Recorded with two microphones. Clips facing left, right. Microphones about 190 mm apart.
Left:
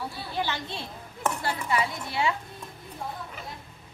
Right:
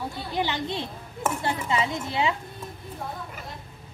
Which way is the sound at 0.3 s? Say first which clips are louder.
Right 4 dB; 15° right (ahead or behind).